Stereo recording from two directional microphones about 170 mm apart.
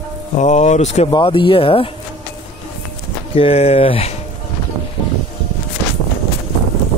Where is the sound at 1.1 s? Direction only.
30° left (ahead or behind).